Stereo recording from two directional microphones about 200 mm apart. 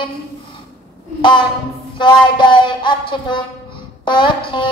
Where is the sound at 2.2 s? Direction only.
25° left (ahead or behind).